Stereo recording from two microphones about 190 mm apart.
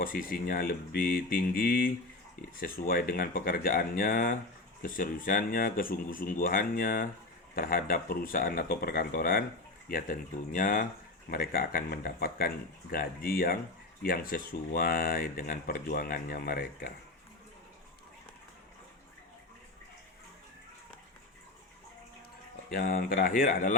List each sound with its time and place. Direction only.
0.0 s speech: 50° left (ahead or behind)
22.7 s speech: 50° left (ahead or behind)